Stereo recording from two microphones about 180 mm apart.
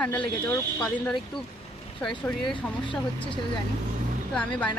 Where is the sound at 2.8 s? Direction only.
30° left (ahead or behind).